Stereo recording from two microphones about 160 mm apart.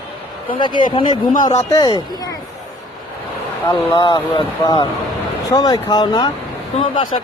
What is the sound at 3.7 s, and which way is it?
Speech, 25° left (ahead or behind).